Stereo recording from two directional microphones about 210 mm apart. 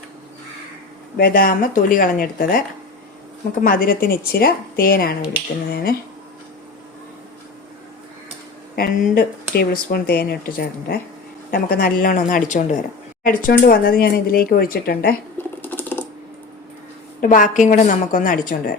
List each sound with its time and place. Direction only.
1.1 s a woman's voice: 40° left (ahead or behind)
8.7 s a woman's voice: 45° left (ahead or behind)
15.6 s typing: 10° left (ahead or behind)
17.2 s a woman's voice: 40° left (ahead or behind)